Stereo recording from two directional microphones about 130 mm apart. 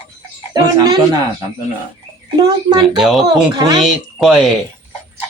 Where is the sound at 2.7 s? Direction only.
30° right (ahead or behind).